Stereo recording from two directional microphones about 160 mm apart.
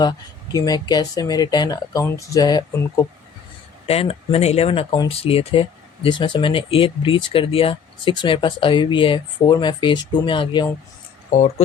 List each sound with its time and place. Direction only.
0.0 s speech: 25° left (ahead or behind)
3.8 s speech: 40° left (ahead or behind)
11.3 s speech: 45° left (ahead or behind)